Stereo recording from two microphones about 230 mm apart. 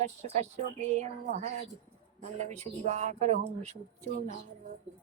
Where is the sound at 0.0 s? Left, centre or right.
Right.